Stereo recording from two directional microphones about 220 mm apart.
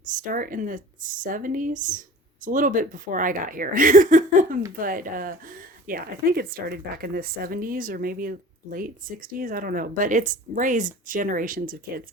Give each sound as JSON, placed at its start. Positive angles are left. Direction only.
{"t": 0.0, "sound": "speech", "side_deg": -35}